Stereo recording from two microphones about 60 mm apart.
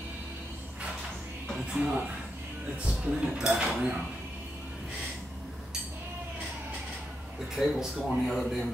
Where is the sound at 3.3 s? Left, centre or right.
Centre.